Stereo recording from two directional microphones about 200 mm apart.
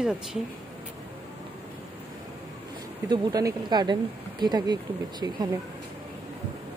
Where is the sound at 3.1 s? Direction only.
20° right (ahead or behind).